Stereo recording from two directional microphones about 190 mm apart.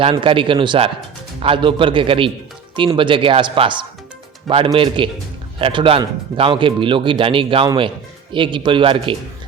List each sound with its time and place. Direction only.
0.0 s speech: 25° right (ahead or behind)